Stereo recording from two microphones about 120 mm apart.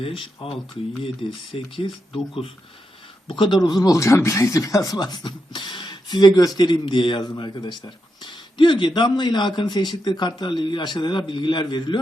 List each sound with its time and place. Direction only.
0.0 s speech: 45° left (ahead or behind)